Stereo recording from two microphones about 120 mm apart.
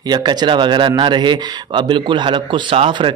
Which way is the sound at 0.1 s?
35° right (ahead or behind).